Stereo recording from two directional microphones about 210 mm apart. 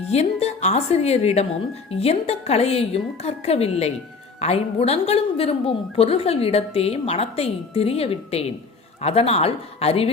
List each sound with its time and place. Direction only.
0.1 s a woman's voice: 30° left (ahead or behind)